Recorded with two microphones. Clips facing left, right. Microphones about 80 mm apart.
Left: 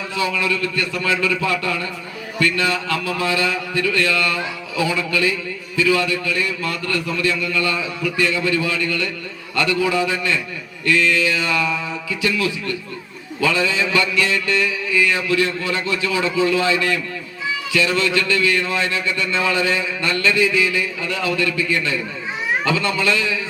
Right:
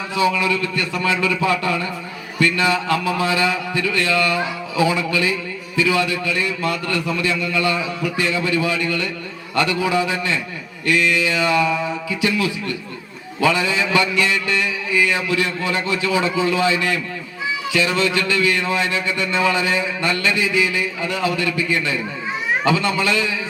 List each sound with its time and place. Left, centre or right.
0.3 s a man's voice: right
14.2 s a man's voice: right
17.7 s a man's voice: right